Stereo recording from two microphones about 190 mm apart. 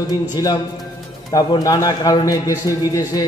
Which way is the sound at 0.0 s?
20° left (ahead or behind).